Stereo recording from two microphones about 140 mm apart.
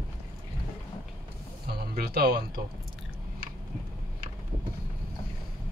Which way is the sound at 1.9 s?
90° right.